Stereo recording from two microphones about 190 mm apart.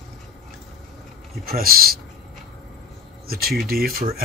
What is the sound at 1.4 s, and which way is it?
Speech, 50° right (ahead or behind).